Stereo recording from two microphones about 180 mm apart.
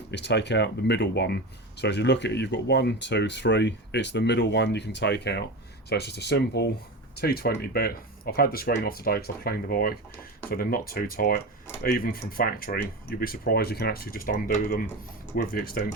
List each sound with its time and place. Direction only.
0.1 s speech: 70° left (ahead or behind); by 15.9 s 55° left (ahead or behind)